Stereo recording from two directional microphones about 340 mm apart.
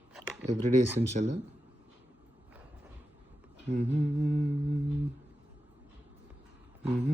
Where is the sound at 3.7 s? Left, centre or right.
Centre.